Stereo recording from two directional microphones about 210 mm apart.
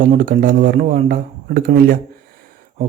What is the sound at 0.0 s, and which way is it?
Speech, 40° right (ahead or behind).